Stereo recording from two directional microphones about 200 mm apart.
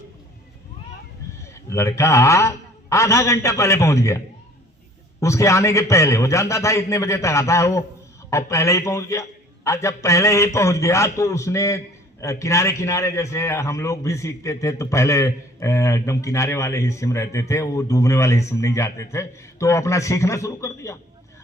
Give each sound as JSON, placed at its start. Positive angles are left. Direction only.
{"t": 1.7, "sound": "a man's voice", "side_deg": 15}
{"t": 5.2, "sound": "a man's voice", "side_deg": 15}